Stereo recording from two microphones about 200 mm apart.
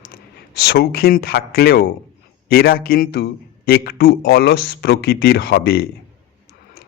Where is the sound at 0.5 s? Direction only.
55° left (ahead or behind).